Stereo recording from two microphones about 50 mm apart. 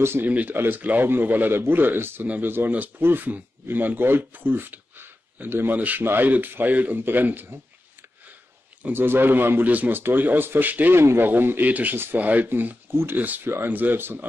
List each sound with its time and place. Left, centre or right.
0.2 s speech: right
1.5 s a man's voice: right
3.6 s speech: right
5.8 s a man's voice: right
8.9 s a man's voice: right
9.7 s speech: right
11.0 s a man's voice: right
11.2 s speech: right
12.4 s a man's voice: right
13.2 s speech: right